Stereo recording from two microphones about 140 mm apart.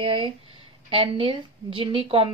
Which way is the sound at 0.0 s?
40° right (ahead or behind).